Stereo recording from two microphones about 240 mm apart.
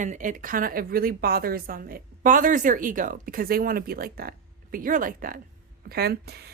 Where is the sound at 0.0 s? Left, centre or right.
Right.